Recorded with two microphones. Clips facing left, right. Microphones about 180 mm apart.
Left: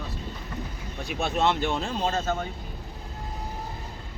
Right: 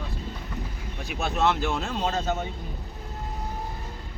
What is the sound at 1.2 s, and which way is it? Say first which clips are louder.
Speech: even; 5° right (ahead or behind).